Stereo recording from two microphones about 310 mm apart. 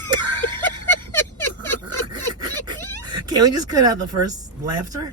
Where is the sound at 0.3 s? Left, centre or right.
Right.